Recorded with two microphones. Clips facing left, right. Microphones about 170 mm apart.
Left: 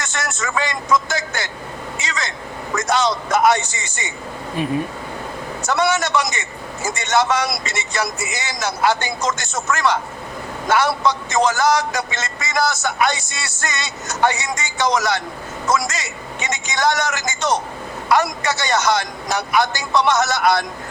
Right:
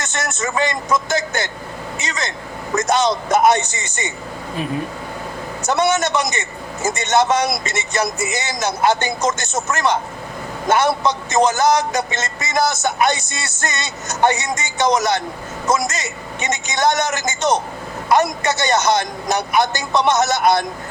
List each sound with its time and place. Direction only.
0.0 s speech: 20° right (ahead or behind)
5.6 s speech: 20° right (ahead or behind)